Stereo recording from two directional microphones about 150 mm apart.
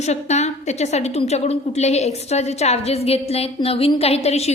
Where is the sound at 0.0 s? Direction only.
50° left (ahead or behind).